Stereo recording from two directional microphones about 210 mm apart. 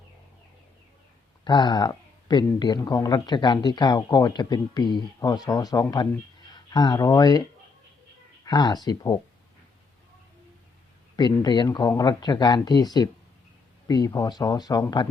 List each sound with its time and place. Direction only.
1.5 s speech: 20° left (ahead or behind)
8.4 s speech: 20° left (ahead or behind)
11.2 s speech: 20° left (ahead or behind)